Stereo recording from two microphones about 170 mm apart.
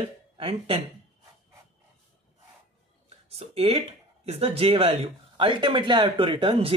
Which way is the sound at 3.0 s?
35° right (ahead or behind).